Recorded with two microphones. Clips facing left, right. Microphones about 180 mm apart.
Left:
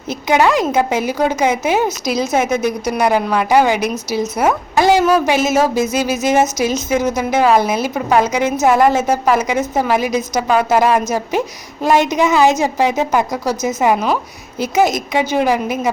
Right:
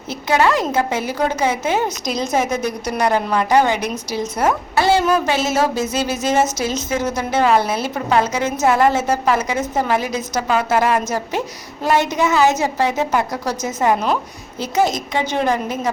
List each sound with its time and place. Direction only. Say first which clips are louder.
0.1 s a woman's voice: left 3 dB; 15° left (ahead or behind)